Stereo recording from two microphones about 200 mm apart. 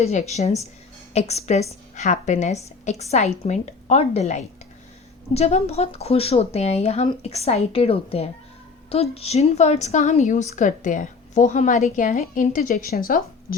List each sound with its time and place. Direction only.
0.0 s a woman's voice: 35° left (ahead or behind)